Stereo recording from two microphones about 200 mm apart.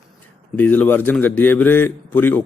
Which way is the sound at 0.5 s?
10° left (ahead or behind).